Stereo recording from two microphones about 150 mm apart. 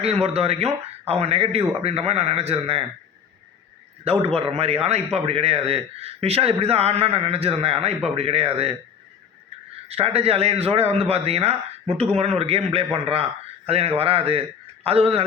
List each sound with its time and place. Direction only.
0.0 s a man's voice: 45° right (ahead or behind)
4.0 s a man's voice: 40° right (ahead or behind)
9.9 s a man's voice: 45° right (ahead or behind)